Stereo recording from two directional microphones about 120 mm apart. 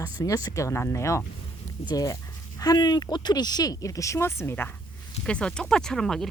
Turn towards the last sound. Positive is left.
turn(degrees=5)  # may be behind; listen again after turning